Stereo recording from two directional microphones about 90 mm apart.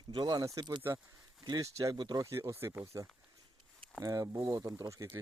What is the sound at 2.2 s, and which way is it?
Speech, 35° right (ahead or behind).